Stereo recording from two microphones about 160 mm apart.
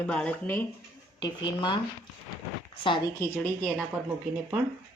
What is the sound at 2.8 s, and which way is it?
Speech, 30° left (ahead or behind).